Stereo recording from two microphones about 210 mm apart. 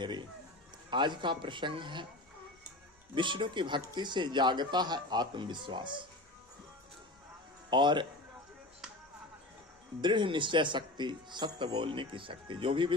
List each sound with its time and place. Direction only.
0.0 s music: 20° right (ahead or behind)
0.9 s speech: 20° right (ahead or behind)
3.2 s speech: 25° right (ahead or behind)
7.7 s speech: 20° right (ahead or behind)
10.0 s speech: 20° right (ahead or behind)